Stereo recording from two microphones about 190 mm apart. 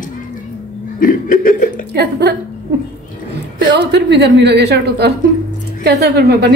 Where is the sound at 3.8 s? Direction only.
65° right (ahead or behind).